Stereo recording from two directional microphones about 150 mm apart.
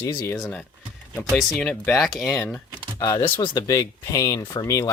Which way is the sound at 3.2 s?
35° left (ahead or behind).